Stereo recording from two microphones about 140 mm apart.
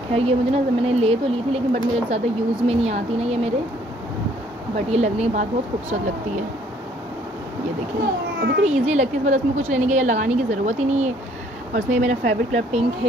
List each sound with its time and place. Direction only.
0.1 s speech: 45° right (ahead or behind)
4.9 s speech: 50° right (ahead or behind)
8.6 s a woman's voice: 50° right (ahead or behind)